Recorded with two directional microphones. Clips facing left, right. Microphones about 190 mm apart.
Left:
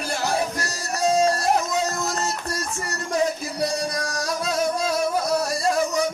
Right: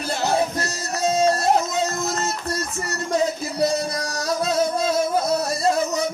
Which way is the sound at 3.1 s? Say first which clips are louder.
Right 2 dB; 25° right (ahead or behind).